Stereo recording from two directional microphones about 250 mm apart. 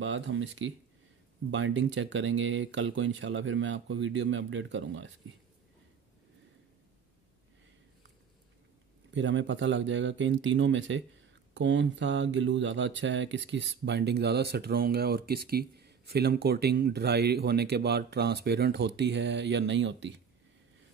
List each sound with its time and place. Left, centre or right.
0.0 s speech: right
9.1 s speech: right